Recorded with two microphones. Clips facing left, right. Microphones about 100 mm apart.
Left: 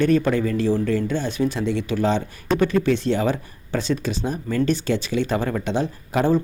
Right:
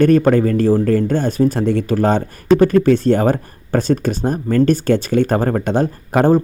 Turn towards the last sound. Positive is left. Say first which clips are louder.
# right 6 dB
turn(degrees=-50)  # may be behind; listen again after turning